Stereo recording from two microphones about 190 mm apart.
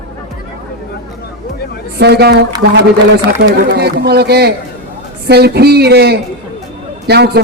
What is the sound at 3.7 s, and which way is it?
A man's voice, 60° right (ahead or behind).